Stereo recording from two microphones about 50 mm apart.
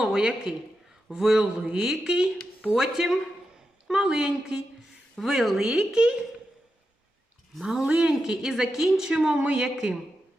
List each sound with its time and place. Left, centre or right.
0.0 s a man's voice: centre
5.2 s speech: centre
7.6 s speech: centre
9.3 s a woman's voice: right
9.6 s speech: centre